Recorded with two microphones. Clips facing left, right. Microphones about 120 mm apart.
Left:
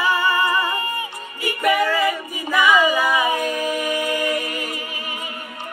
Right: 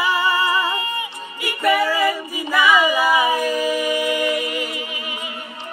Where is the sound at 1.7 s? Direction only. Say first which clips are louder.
Right 2 dB; 10° right (ahead or behind).